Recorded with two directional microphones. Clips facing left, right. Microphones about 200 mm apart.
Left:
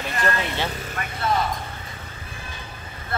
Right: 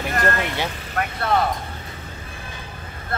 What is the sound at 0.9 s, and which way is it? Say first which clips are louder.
Vehicle: right 6 dB; 60° right (ahead or behind).